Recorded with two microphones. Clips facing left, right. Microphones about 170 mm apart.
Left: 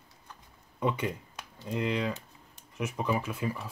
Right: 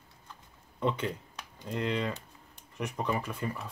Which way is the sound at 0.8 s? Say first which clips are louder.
Left 1 dB; 10° left (ahead or behind).